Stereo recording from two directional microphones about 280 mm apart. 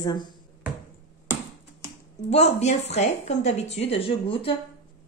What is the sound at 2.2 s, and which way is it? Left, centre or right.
Speech, left.